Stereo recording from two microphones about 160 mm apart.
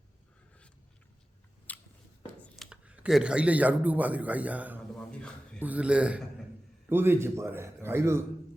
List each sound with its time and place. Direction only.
1.7 s biting: 10° left (ahead or behind)
2.2 s a sound: 10° left (ahead or behind)
2.6 s a man's voice: 10° right (ahead or behind)